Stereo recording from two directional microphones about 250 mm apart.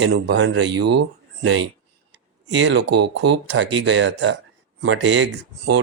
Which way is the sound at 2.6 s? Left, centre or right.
Right.